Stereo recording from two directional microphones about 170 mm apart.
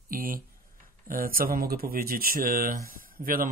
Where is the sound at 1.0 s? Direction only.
55° right (ahead or behind).